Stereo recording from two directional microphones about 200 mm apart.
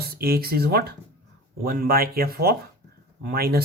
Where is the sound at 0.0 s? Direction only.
50° right (ahead or behind).